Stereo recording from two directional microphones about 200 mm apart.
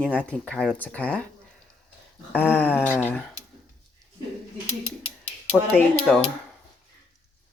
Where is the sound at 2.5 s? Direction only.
10° left (ahead or behind).